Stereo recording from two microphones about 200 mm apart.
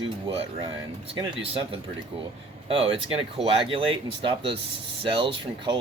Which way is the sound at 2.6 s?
30° right (ahead or behind).